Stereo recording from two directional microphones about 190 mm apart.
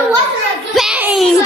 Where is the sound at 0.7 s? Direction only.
5° right (ahead or behind).